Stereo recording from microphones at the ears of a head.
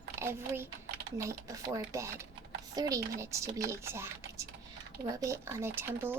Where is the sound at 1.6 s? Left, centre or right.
Right.